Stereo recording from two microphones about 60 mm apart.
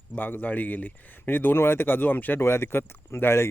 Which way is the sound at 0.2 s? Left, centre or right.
Left.